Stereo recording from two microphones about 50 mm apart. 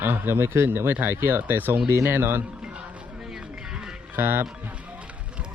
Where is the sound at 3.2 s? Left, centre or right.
Centre.